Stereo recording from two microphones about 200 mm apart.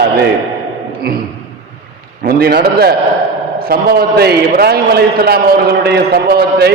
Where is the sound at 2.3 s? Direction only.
50° right (ahead or behind).